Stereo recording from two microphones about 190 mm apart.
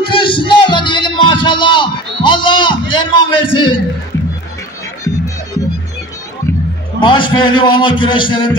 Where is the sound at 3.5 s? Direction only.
25° left (ahead or behind).